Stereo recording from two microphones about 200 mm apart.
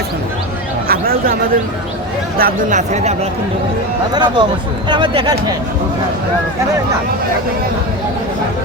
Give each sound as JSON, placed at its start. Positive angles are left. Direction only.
{"t": 0.9, "sound": "a sound", "side_deg": -50}
{"t": 2.4, "sound": "speech", "side_deg": -40}
{"t": 4.1, "sound": "speech", "side_deg": -20}